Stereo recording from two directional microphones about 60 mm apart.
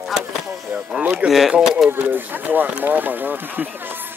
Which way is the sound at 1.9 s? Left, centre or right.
Right.